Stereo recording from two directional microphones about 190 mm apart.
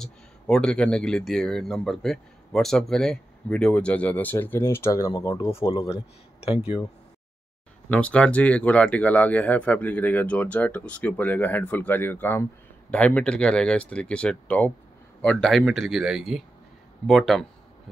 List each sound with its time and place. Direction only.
0.0 s speech: 5° left (ahead or behind); by 6.9 s 25° left (ahead or behind)
7.9 s speech: 5° left (ahead or behind)